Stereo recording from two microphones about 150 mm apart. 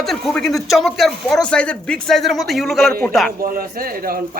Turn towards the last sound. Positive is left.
turn(degrees=-80)